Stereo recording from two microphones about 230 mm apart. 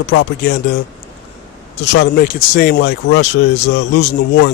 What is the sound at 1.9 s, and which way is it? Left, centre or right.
Speech, left.